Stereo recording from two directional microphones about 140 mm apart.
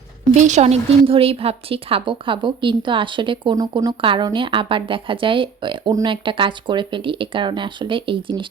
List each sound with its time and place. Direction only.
0.3 s speech: 55° right (ahead or behind); by 8.4 s 35° right (ahead or behind)